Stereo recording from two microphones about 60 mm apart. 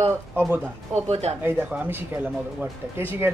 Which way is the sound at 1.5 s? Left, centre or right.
Right.